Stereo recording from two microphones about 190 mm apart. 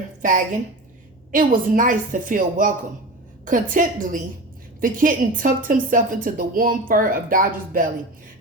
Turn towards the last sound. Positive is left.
turn(degrees=-45)  # may be behind; listen again after turning